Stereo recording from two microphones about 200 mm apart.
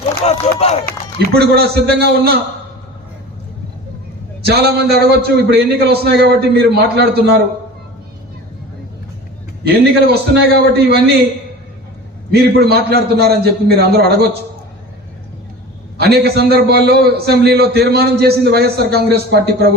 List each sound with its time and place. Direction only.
0.0 s speech: 30° left (ahead or behind)
1.4 s a man's voice: 50° right (ahead or behind)
4.4 s a man's voice: 55° right (ahead or behind)
9.6 s a man's voice: 50° right (ahead or behind)
12.3 s a man's voice: 50° right (ahead or behind)
16.0 s a man's voice: 55° right (ahead or behind)